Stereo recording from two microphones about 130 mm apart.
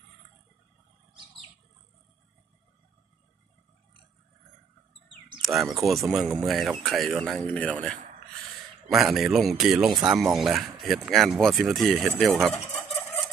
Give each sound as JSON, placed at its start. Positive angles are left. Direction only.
{"t": 5.4, "sound": "a man's voice", "side_deg": 0}